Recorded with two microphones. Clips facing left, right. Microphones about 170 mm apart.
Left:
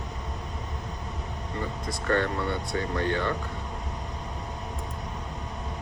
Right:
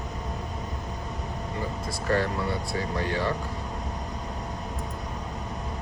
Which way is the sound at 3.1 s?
35° right (ahead or behind).